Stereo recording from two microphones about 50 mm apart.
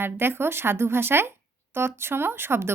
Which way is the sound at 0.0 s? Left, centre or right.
Right.